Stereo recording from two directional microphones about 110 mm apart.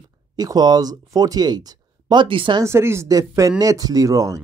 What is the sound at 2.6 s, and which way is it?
Speech, 25° right (ahead or behind).